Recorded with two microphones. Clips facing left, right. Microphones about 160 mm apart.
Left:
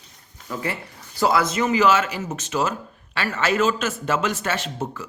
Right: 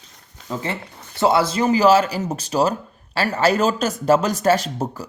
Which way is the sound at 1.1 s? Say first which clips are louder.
Right 3 dB; 30° right (ahead or behind).